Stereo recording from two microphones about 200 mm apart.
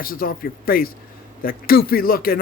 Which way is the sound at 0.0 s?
45° left (ahead or behind).